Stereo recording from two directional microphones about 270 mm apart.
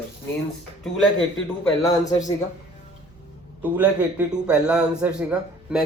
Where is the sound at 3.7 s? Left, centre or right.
Centre.